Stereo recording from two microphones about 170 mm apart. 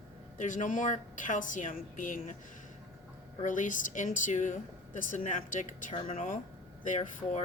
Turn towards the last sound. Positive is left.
turn(degrees=45)  # may be behind; listen again after turning